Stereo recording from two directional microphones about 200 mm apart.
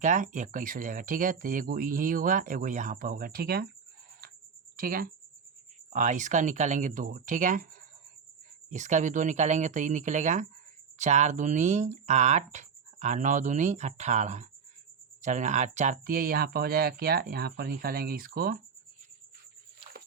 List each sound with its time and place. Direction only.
0.0 s speech: 40° right (ahead or behind)
4.8 s speech: 45° right (ahead or behind)
8.7 s speech: 35° right (ahead or behind)